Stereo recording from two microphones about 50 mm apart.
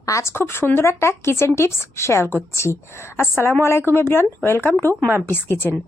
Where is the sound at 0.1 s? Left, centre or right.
Left.